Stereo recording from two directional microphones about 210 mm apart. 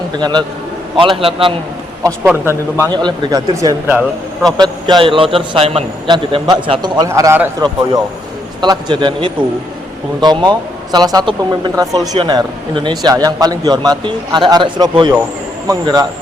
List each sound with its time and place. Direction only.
0.2 s speech: 20° right (ahead or behind)
2.2 s speech: 10° right (ahead or behind)
8.6 s speech: 20° right (ahead or behind)